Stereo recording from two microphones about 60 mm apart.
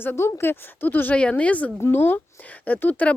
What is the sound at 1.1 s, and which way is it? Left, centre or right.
Speech, left.